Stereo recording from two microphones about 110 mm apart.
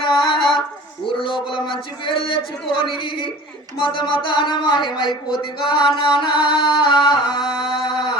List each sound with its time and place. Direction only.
0.0 s female singing: 50° left (ahead or behind)
1.2 s speech: 50° left (ahead or behind)
7.6 s a sound: 45° left (ahead or behind)